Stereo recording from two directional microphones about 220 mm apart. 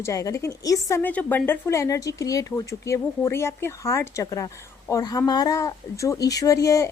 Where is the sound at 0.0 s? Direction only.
15° left (ahead or behind).